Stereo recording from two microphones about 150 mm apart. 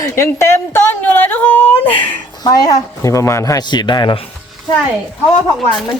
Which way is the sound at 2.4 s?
25° left (ahead or behind).